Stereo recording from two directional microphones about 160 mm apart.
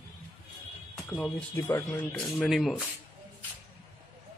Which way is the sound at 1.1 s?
10° left (ahead or behind).